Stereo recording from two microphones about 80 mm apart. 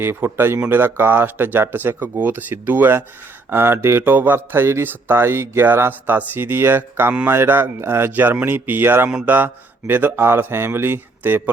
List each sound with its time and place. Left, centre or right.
0.0 s speech: right
9.0 s speech: centre
9.3 s speech: right